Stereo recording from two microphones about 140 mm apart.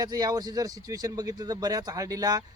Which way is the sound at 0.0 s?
30° right (ahead or behind).